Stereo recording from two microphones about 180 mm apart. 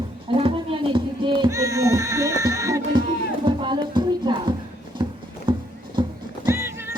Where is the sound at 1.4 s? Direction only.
20° right (ahead or behind).